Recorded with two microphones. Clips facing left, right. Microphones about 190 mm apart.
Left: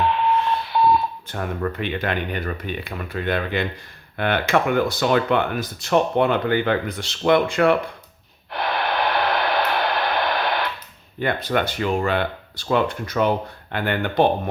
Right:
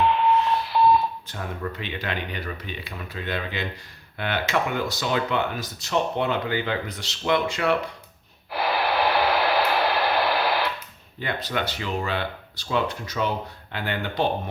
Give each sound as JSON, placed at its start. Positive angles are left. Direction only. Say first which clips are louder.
{"t": 0.7, "sound": "smoke detector", "louder": "left 1 dB", "side_deg": 0}
{"t": 1.3, "sound": "speech", "louder": "left 6 dB", "side_deg": 55}
{"t": 8.5, "sound": "a sound", "louder": "even", "side_deg": -5}
{"t": 11.2, "sound": "speech", "louder": "left 6 dB", "side_deg": 55}